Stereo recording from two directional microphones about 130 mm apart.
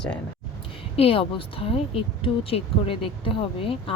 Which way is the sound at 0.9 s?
45° left (ahead or behind).